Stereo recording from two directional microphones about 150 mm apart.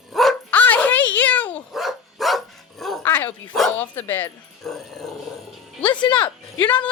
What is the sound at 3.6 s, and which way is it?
Speech, 5° left (ahead or behind).